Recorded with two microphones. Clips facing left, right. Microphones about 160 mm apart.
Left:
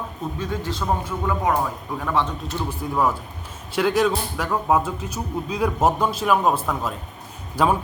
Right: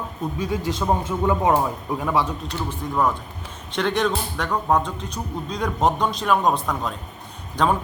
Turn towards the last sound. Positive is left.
turn(degrees=5)  # may be behind; listen again after turning